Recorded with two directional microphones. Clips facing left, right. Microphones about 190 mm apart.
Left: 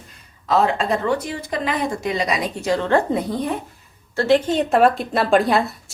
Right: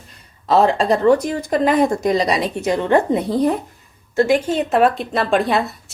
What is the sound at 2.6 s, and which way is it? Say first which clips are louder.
Speech: right 1 dB; 20° right (ahead or behind).